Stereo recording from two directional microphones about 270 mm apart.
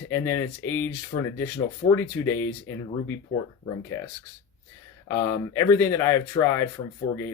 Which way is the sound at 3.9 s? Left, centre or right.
Centre.